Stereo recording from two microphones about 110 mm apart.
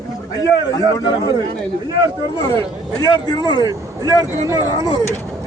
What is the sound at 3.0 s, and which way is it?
Speech, 40° left (ahead or behind).